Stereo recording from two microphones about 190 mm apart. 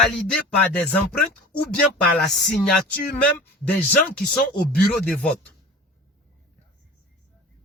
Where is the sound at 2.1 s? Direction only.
5° left (ahead or behind).